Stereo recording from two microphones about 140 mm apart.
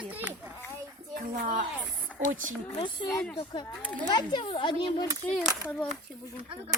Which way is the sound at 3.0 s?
5° left (ahead or behind).